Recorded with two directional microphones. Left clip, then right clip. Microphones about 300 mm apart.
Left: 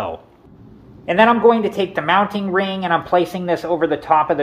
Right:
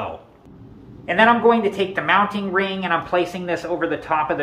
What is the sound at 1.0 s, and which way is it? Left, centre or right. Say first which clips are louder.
Speech: left 2 dB; left.